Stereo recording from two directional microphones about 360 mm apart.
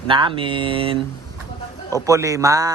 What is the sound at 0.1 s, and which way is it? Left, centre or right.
Speech, centre.